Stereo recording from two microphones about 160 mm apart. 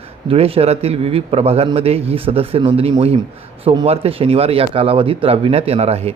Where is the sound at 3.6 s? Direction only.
25° right (ahead or behind).